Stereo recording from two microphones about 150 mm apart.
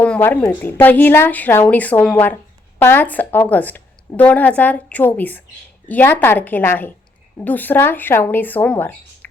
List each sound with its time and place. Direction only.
0.0 s speech: 10° left (ahead or behind)